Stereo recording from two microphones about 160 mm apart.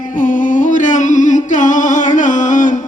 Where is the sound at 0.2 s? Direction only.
55° left (ahead or behind).